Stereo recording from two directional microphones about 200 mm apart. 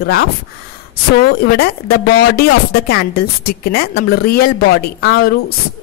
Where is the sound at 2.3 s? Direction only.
50° left (ahead or behind).